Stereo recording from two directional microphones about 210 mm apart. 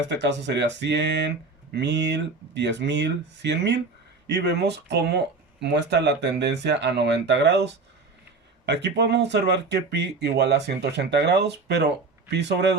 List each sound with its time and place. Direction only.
0.1 s speech: 55° right (ahead or behind)